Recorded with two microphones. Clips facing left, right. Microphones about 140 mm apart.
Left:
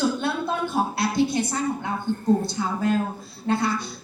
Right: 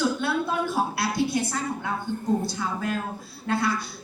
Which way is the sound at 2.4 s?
25° left (ahead or behind).